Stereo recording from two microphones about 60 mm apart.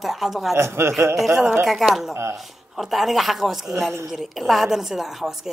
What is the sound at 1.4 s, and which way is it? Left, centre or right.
Speech, right.